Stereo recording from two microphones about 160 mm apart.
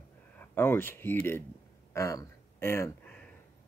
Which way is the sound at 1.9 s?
20° left (ahead or behind).